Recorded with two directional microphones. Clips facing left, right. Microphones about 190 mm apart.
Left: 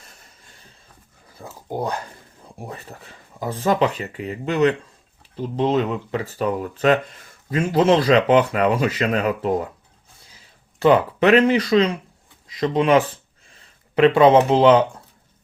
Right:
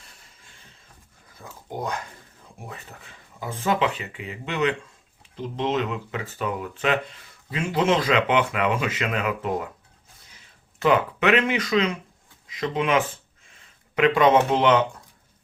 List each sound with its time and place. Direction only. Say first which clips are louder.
1.4 s a sound: left 5 dB; 35° left (ahead or behind)
2.6 s speech: left 5 dB; 35° left (ahead or behind)
10.8 s speech: left 5 dB; 30° left (ahead or behind)